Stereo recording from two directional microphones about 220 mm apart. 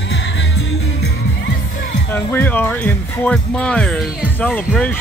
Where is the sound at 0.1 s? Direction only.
50° left (ahead or behind).